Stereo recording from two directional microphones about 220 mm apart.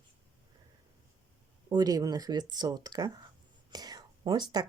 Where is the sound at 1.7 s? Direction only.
15° right (ahead or behind).